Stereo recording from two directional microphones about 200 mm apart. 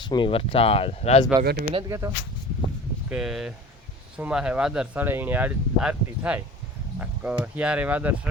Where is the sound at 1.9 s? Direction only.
15° right (ahead or behind).